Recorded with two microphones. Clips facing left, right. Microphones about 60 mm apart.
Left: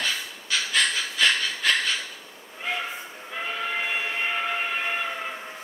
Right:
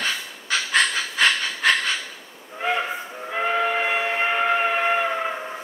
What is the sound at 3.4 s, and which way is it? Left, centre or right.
Steam whistle, right.